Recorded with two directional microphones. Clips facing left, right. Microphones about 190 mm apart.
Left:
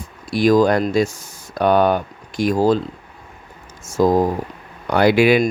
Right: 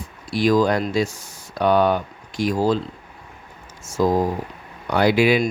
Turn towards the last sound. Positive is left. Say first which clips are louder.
# left 3 dB
turn(degrees=60)  # may be behind; listen again after turning